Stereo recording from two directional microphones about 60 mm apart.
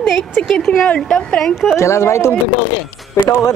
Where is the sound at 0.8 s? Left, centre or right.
Centre.